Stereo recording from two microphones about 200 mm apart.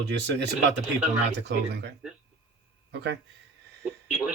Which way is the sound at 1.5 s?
55° right (ahead or behind).